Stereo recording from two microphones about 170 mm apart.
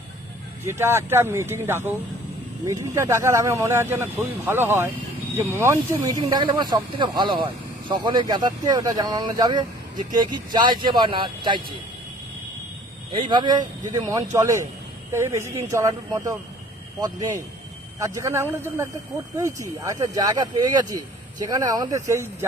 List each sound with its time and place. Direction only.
0.6 s speech: 15° right (ahead or behind)
13.1 s speech: 30° right (ahead or behind)